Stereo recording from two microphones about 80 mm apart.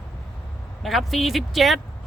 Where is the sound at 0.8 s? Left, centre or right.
Centre.